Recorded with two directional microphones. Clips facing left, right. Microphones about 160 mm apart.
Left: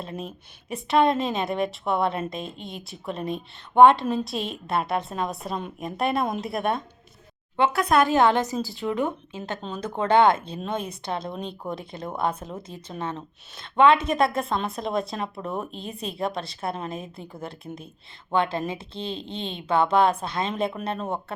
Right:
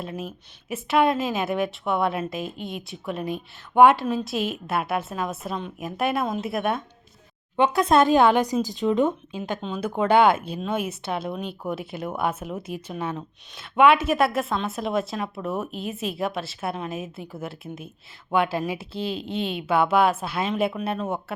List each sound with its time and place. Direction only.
0.0 s speech: 5° right (ahead or behind)
7.5 s speech: 15° right (ahead or behind)
8.1 s speech: 10° right (ahead or behind)
9.6 s speech: 5° right (ahead or behind)